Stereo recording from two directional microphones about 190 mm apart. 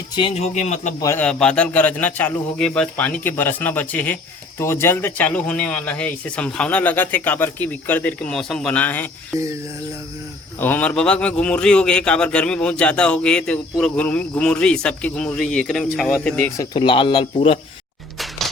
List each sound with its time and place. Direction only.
0.2 s a man's voice: 30° left (ahead or behind)
0.9 s a man's voice: 15° left (ahead or behind)
1.2 s a man's voice: 5° left (ahead or behind)
10.6 s a man's voice: 10° left (ahead or behind)
16.6 s speech: 25° left (ahead or behind)